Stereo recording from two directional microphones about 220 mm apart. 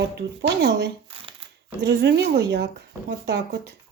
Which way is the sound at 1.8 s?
50° right (ahead or behind).